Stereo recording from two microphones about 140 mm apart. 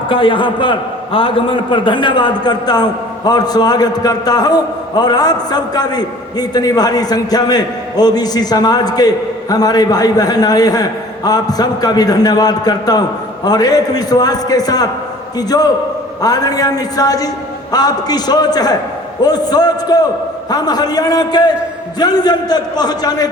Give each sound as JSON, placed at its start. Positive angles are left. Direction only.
{"t": 0.1, "sound": "a man's voice", "side_deg": 40}